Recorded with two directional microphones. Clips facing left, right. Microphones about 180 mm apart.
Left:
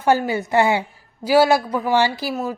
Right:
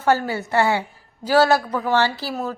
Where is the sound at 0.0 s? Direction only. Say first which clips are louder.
Left 2 dB; 15° left (ahead or behind).